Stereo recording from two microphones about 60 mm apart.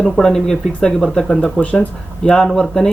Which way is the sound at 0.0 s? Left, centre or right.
Centre.